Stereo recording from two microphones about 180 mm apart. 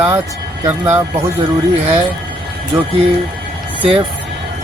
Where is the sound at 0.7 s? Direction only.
15° right (ahead or behind).